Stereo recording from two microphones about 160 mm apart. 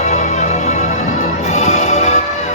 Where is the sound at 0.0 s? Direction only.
45° left (ahead or behind).